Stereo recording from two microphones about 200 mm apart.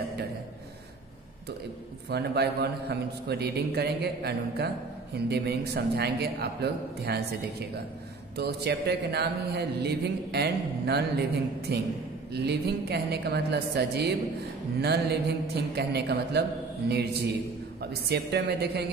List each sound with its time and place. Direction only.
2.0 s a man's voice: 55° right (ahead or behind)
8.4 s speech: 55° right (ahead or behind)